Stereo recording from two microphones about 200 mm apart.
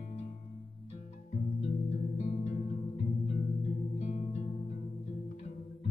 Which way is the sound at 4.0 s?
35° left (ahead or behind).